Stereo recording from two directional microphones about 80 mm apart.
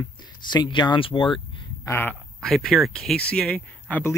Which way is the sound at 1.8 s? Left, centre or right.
Left.